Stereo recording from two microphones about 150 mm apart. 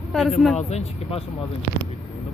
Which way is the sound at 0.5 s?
45° left (ahead or behind).